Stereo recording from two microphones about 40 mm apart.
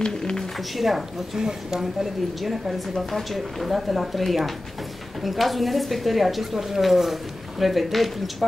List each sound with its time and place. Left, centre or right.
0.0 s speech: left
0.7 s speech: centre